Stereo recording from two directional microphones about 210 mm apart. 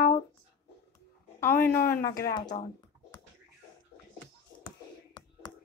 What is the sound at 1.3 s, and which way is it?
Speech, 10° left (ahead or behind).